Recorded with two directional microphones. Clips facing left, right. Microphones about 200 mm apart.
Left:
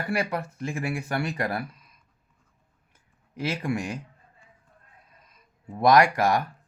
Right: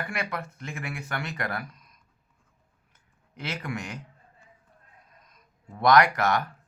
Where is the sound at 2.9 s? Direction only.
30° left (ahead or behind).